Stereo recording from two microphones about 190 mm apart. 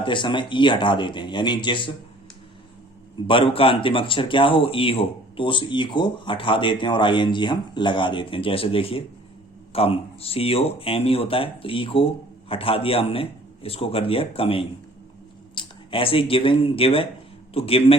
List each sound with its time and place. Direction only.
0.0 s speech: 25° left (ahead or behind)
3.2 s speech: 30° left (ahead or behind)